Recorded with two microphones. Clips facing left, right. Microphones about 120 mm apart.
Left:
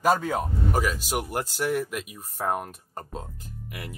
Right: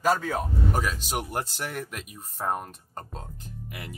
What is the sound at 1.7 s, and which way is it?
Speech, 5° left (ahead or behind).